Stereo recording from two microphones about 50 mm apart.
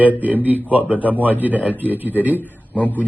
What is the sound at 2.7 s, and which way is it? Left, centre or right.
Speech, left.